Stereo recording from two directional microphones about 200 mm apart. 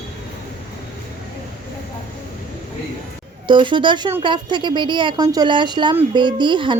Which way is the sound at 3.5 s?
25° right (ahead or behind).